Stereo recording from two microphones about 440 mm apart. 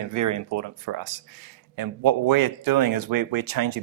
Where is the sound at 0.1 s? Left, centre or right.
Right.